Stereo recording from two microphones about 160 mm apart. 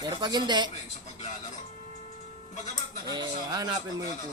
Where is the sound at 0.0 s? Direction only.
25° right (ahead or behind).